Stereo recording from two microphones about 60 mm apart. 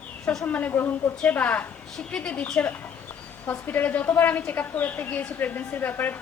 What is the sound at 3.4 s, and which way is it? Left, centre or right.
A woman's voice, left.